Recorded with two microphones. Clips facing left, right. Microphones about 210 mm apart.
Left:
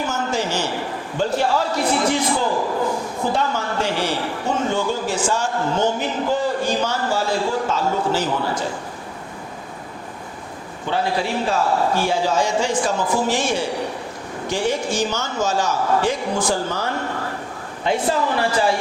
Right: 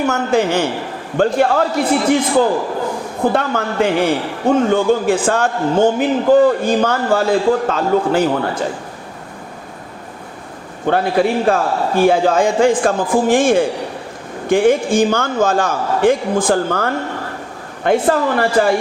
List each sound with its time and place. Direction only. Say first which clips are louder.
0.0 s a man's voice: right 7 dB; 60° right (ahead or behind)
3.3 s a man's voice: right 5 dB; 55° right (ahead or behind)
10.8 s a man's voice: right 7 dB; 55° right (ahead or behind)